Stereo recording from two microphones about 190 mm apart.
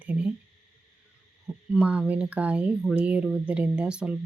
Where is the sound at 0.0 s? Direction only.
5° right (ahead or behind).